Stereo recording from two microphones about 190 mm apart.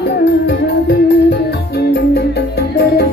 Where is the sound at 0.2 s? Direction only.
60° left (ahead or behind).